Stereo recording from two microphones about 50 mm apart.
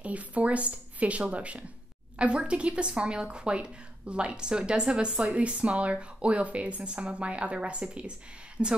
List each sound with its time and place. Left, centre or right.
0.0 s a woman's voice: right